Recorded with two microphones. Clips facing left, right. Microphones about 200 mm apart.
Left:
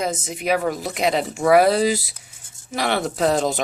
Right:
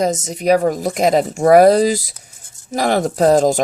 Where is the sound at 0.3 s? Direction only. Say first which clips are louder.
Right 7 dB; 40° right (ahead or behind).